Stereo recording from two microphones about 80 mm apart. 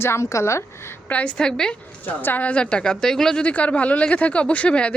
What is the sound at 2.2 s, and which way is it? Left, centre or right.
A woman's voice, left.